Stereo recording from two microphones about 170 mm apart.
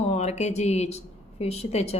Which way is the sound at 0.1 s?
40° left (ahead or behind).